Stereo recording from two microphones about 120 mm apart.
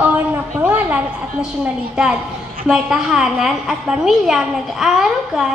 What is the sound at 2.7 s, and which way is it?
A woman's voice, 5° right (ahead or behind).